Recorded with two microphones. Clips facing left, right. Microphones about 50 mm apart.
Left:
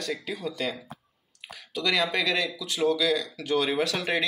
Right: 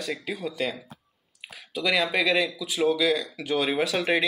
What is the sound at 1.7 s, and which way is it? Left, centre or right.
Speech, centre.